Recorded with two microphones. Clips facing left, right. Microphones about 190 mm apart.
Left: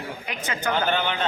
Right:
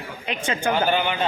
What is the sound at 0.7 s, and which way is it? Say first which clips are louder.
Speech: right 1 dB; 10° right (ahead or behind).